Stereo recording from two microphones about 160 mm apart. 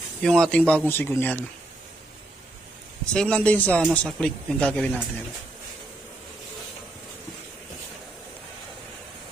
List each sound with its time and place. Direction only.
0.2 s a man's voice: 5° left (ahead or behind)
3.1 s a man's voice: 5° left (ahead or behind)